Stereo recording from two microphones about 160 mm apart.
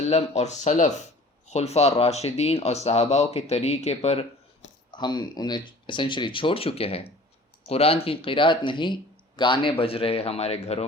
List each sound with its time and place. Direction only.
0.1 s speech: 40° left (ahead or behind)
4.9 s speech: 25° left (ahead or behind)